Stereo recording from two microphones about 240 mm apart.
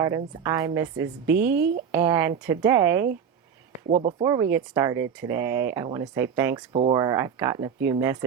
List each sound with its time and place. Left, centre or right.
0.4 s speech: centre
3.8 s speech: right
4.2 s speech: centre